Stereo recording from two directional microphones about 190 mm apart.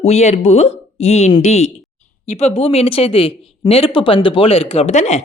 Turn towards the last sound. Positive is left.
turn(degrees=35)  # may be behind; listen again after turning